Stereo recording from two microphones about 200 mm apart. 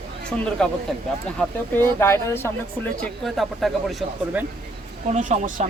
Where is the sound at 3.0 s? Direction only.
Centre (ahead or behind).